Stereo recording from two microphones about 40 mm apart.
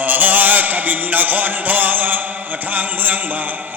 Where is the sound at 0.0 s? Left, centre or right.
Right.